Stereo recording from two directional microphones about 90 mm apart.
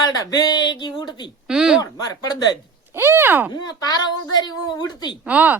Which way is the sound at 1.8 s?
45° left (ahead or behind).